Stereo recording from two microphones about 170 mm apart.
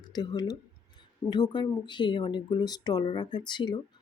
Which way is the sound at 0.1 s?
25° left (ahead or behind).